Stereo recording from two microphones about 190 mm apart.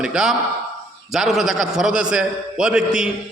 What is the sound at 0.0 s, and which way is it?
A man's voice, 5° right (ahead or behind).